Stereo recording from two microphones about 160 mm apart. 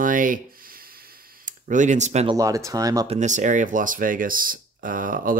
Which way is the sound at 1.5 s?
50° right (ahead or behind).